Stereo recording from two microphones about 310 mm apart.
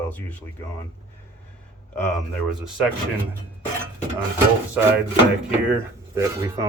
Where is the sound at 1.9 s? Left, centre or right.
Centre.